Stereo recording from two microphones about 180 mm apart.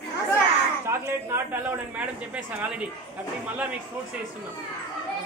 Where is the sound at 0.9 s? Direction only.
15° right (ahead or behind).